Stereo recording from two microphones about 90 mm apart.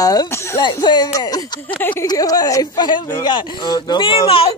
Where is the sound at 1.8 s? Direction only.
20° left (ahead or behind).